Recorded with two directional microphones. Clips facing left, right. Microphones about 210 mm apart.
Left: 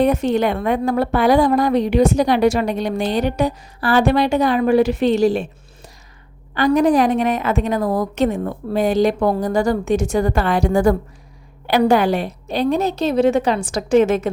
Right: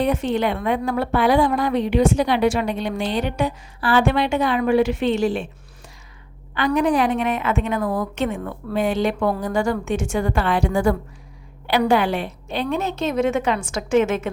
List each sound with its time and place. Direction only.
0.0 s a woman's voice: 40° left (ahead or behind)
6.5 s a woman's voice: 40° left (ahead or behind)